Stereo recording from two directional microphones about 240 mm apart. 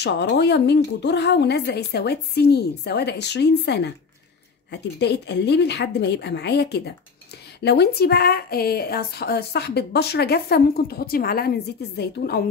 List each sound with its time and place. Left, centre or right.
0.0 s a woman's voice: left